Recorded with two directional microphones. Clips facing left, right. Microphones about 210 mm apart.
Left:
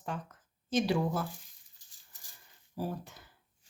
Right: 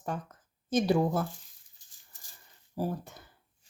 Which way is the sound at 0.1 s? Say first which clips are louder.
Right 3 dB; 45° right (ahead or behind).